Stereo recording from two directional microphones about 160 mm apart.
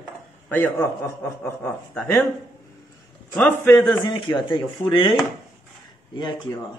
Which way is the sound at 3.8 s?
25° left (ahead or behind).